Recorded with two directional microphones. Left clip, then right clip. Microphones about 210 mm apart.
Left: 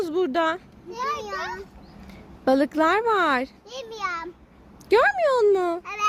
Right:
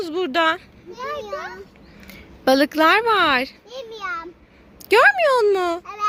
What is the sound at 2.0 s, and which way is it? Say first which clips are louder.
A child's voice: right 4 dB; 5° left (ahead or behind).